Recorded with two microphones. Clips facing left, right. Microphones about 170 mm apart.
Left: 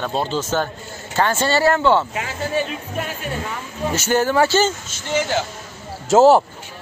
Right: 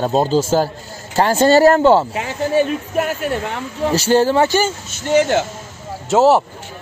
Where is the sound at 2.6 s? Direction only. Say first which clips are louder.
Right 8 dB; 50° right (ahead or behind).